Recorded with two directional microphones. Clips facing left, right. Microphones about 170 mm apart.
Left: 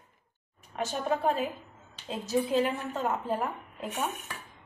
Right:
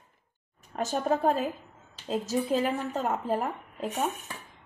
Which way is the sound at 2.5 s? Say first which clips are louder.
Right 1 dB; 35° right (ahead or behind).